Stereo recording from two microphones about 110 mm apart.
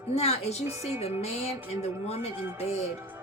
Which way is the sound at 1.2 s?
70° left (ahead or behind).